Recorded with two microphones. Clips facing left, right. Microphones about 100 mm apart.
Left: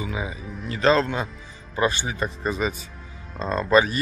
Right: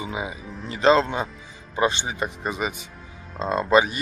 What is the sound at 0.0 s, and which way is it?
Speech, 20° right (ahead or behind).